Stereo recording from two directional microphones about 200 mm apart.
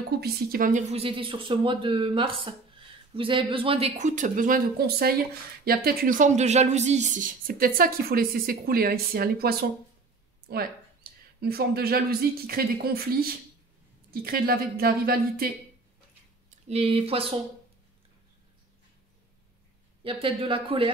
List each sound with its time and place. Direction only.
0.2 s speech: 45° right (ahead or behind)
16.4 s speech: 30° right (ahead or behind)
20.0 s speech: 25° right (ahead or behind)